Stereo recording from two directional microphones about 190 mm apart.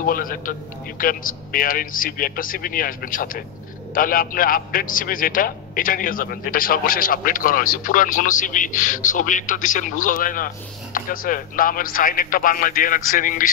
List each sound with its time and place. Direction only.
0.0 s a man's voice: 50° left (ahead or behind)